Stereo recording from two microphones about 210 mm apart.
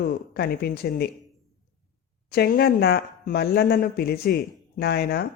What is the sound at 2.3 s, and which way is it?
Speech, 50° left (ahead or behind).